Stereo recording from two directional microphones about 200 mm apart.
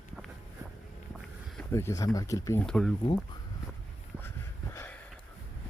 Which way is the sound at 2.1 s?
15° left (ahead or behind).